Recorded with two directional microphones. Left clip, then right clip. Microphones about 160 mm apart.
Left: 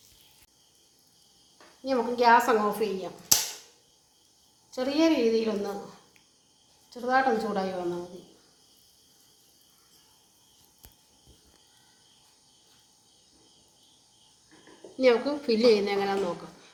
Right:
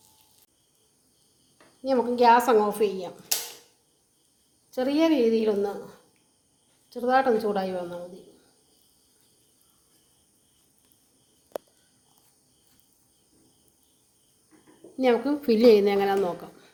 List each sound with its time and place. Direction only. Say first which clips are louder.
1.8 s speech: right 3 dB; 90° right
4.7 s speech: right 2 dB; 90° right
6.9 s speech: right 3 dB; 90° right
14.9 s speech: even; 90° right